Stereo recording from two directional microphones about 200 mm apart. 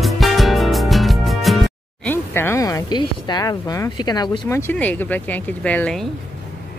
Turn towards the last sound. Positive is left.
turn(degrees=5)  # may be behind; listen again after turning